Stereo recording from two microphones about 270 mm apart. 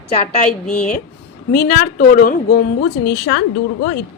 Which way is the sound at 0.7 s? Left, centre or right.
Centre.